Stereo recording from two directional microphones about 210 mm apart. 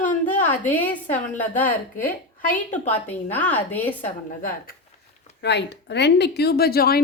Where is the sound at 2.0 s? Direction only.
40° left (ahead or behind).